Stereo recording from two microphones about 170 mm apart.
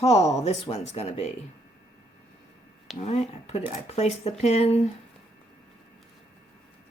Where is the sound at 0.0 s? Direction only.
40° left (ahead or behind).